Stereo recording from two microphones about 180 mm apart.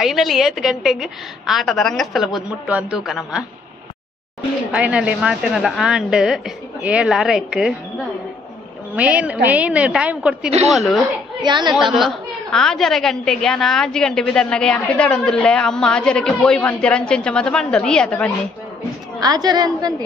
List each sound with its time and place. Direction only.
0.0 s a woman's voice: centre (ahead or behind)
4.7 s a woman's voice: 5° right (ahead or behind)
8.9 s a woman's voice: 5° right (ahead or behind)
11.4 s a woman's voice: 25° right (ahead or behind)
11.7 s a woman's voice: centre (ahead or behind)
19.1 s a woman's voice: 20° right (ahead or behind)